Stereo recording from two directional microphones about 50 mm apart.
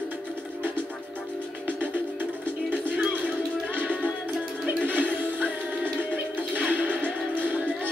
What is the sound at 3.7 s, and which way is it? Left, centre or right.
Music, right.